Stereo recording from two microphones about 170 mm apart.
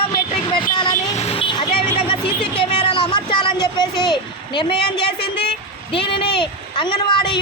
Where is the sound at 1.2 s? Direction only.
35° left (ahead or behind).